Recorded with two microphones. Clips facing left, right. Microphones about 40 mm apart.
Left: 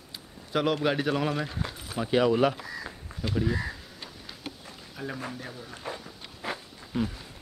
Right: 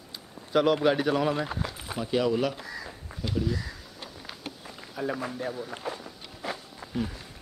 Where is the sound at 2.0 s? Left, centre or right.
Left.